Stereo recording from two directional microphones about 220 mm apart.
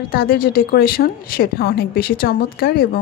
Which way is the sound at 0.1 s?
45° left (ahead or behind).